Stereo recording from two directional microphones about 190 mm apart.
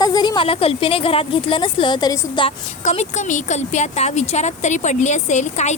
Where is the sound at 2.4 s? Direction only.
35° left (ahead or behind).